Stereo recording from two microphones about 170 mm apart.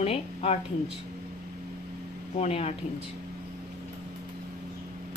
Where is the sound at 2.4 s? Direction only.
40° left (ahead or behind).